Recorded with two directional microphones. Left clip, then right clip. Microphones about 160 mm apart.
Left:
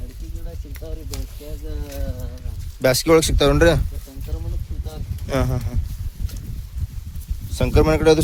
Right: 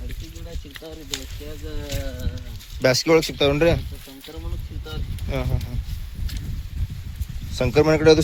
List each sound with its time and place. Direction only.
2.8 s speech: 15° left (ahead or behind)
3.2 s speech: 30° left (ahead or behind)
5.3 s speech: 45° left (ahead or behind)
7.5 s speech: centre (ahead or behind)